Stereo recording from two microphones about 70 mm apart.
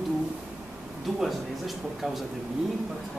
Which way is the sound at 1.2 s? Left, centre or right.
Centre.